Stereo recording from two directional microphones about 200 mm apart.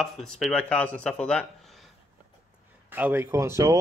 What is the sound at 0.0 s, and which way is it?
Speech, centre (ahead or behind).